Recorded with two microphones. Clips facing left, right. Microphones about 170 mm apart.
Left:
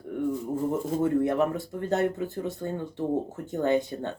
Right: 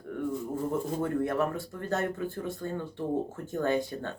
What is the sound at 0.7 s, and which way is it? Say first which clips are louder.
Speech: left 5 dB; 20° left (ahead or behind).